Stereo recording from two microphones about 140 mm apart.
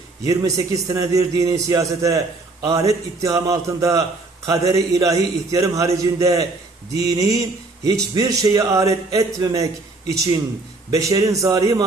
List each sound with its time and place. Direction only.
0.3 s a man's voice: 25° right (ahead or behind)
10.9 s a man's voice: 25° right (ahead or behind)